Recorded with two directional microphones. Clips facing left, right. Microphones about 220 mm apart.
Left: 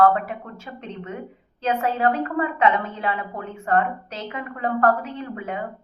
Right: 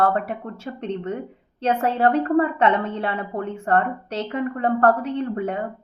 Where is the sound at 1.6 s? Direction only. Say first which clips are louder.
Right 2 dB; 30° right (ahead or behind).